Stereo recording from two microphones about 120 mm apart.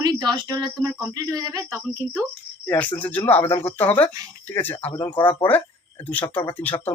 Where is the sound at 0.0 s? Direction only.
35° right (ahead or behind).